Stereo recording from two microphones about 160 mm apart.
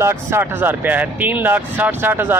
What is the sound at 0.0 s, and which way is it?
A man's voice, 15° right (ahead or behind).